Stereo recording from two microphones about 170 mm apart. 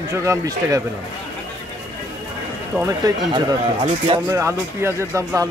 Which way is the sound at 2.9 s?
20° right (ahead or behind).